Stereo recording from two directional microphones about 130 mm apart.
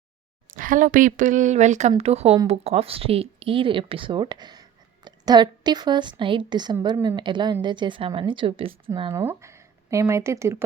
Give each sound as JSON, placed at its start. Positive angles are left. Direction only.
{"t": 0.5, "sound": "a woman's voice", "side_deg": -90}
{"t": 2.0, "sound": "a woman's voice", "side_deg": -55}
{"t": 9.1, "sound": "speech", "side_deg": -20}